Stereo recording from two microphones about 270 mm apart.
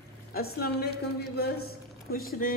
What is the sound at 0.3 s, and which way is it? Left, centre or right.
Music, left.